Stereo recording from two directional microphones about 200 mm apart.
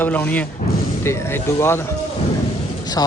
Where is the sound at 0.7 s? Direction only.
50° left (ahead or behind).